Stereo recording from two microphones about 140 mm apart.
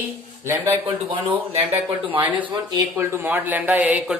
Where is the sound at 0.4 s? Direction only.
20° right (ahead or behind).